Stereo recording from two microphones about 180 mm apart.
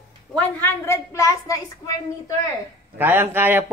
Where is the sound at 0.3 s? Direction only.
10° left (ahead or behind).